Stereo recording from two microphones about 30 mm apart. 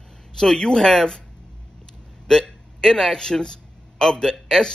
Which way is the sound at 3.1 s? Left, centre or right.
Left.